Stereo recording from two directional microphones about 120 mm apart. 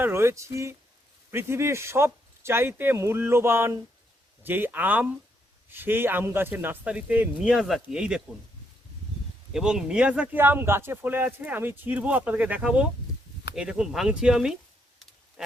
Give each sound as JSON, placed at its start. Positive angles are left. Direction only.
{"t": 0.0, "sound": "a man's voice", "side_deg": -20}
{"t": 9.5, "sound": "a man's voice", "side_deg": -5}
{"t": 15.4, "sound": "pig", "side_deg": -5}